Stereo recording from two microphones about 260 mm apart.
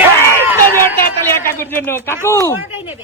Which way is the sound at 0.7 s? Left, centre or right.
Centre.